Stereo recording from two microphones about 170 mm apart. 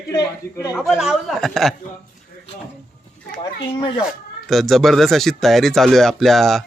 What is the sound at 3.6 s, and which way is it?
Speech, 30° left (ahead or behind).